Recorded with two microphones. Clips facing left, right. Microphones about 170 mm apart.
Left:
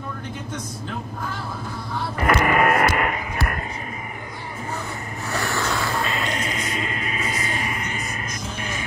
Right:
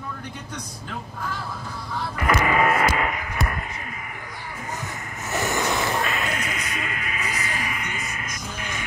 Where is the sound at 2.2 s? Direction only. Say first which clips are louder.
Left 2 dB; 55° left (ahead or behind).